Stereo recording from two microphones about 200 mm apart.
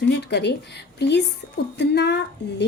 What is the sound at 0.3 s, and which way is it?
A woman's voice, 60° left (ahead or behind).